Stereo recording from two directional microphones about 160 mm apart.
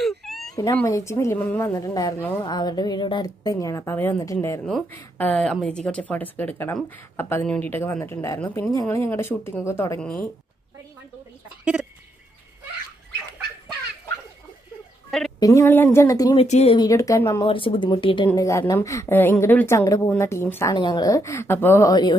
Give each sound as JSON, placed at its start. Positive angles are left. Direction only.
{"t": 0.0, "sound": "baby cry", "side_deg": 0}
{"t": 0.7, "sound": "a woman's voice", "side_deg": 20}
{"t": 4.6, "sound": "speech", "side_deg": 5}
{"t": 11.6, "sound": "bird", "side_deg": -10}
{"t": 15.0, "sound": "a sound", "side_deg": 0}
{"t": 15.3, "sound": "a woman's voice", "side_deg": 20}
{"t": 16.3, "sound": "speech", "side_deg": 40}
{"t": 16.7, "sound": "a woman's voice", "side_deg": 20}
{"t": 17.5, "sound": "a woman's voice", "side_deg": 35}
{"t": 20.7, "sound": "a woman's voice", "side_deg": 25}